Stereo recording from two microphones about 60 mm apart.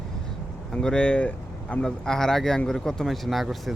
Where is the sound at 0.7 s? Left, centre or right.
Centre.